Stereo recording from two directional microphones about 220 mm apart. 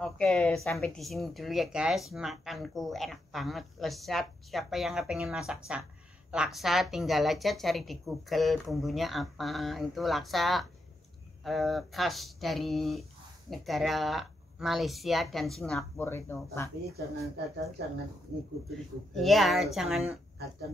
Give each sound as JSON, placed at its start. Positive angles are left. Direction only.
{"t": 0.0, "sound": "speech", "side_deg": 0}
{"t": 18.7, "sound": "speech", "side_deg": 0}